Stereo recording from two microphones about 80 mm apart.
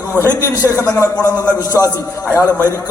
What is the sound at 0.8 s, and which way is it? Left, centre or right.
A man's voice, left.